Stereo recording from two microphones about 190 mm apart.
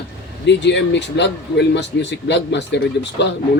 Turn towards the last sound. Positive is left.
turn(degrees=65)  # may be behind; listen again after turning